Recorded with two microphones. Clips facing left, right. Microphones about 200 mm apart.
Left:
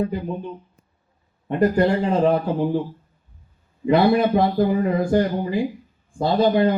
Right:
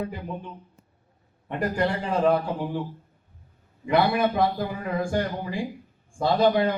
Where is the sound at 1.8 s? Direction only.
25° left (ahead or behind).